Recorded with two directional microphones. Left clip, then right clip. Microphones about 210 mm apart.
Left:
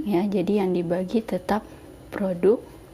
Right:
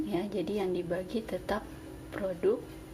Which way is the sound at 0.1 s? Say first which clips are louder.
Left 9 dB; 40° left (ahead or behind).